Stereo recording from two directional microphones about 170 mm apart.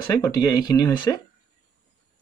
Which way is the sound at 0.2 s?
20° left (ahead or behind).